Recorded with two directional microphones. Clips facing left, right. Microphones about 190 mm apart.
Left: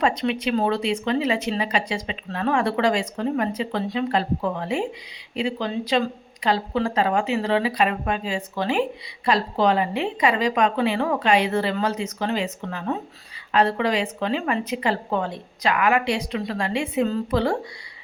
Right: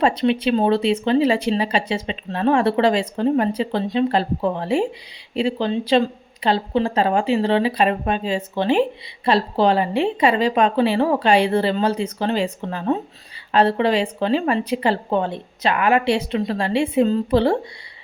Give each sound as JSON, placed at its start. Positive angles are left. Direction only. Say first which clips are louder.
{"t": 0.0, "sound": "speech", "louder": "right 5 dB", "side_deg": -30}